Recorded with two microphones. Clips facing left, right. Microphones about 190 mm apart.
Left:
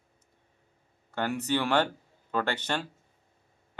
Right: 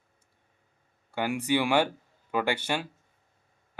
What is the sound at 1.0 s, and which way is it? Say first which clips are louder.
Speech: right 2 dB; 10° right (ahead or behind).